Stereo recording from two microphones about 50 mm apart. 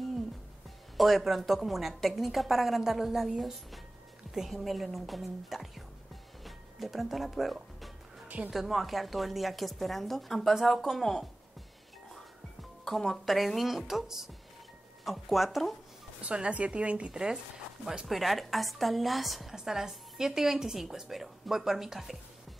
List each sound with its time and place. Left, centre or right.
0.9 s a woman's voice: centre
6.4 s music: centre
8.5 s a woman's voice: centre
12.8 s a woman's voice: centre
16.2 s a woman's voice: right
17.1 s a woman's voice: centre
18.0 s a woman's voice: centre